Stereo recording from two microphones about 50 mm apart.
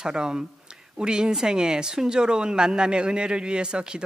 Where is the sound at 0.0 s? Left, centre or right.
Centre.